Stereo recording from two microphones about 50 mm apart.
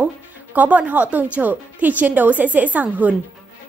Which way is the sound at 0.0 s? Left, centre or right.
Right.